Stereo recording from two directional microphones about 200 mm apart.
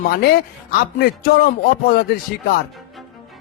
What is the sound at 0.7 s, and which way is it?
Speech, 45° left (ahead or behind).